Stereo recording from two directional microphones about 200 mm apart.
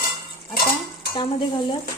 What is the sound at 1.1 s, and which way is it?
Stir, 25° left (ahead or behind).